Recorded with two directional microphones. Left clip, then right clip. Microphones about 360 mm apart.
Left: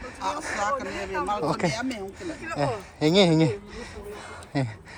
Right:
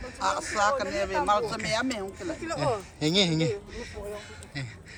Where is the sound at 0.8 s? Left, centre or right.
Right.